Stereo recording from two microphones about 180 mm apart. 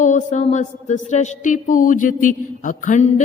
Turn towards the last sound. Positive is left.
turn(degrees=45)  # may be behind; listen again after turning